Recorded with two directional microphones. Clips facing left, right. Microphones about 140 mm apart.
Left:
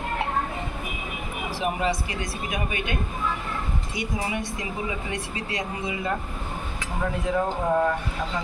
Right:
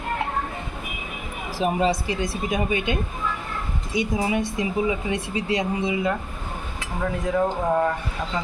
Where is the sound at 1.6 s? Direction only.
25° right (ahead or behind).